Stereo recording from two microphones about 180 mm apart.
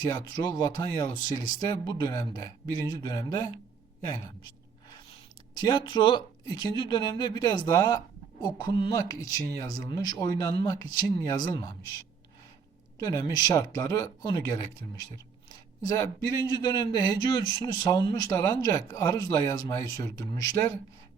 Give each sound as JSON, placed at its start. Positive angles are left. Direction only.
{"t": 0.0, "sound": "speech", "side_deg": 25}
{"t": 4.0, "sound": "a sound", "side_deg": 25}
{"t": 5.5, "sound": "speech", "side_deg": 25}
{"t": 13.0, "sound": "speech", "side_deg": 20}